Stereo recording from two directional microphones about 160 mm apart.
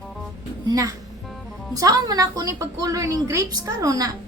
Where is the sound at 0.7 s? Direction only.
20° right (ahead or behind).